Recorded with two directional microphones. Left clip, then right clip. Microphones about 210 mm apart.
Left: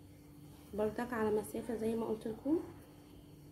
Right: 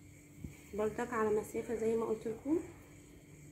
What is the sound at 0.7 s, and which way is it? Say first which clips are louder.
A woman's voice: right 1 dB; 15° left (ahead or behind).